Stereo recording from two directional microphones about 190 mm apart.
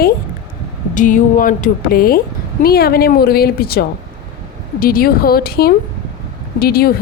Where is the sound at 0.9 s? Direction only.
45° left (ahead or behind).